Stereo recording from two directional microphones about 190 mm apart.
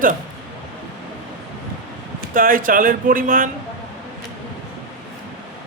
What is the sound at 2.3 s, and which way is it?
Speech, 45° right (ahead or behind).